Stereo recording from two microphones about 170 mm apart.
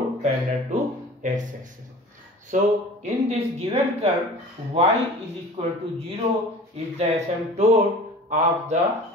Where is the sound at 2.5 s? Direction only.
40° right (ahead or behind).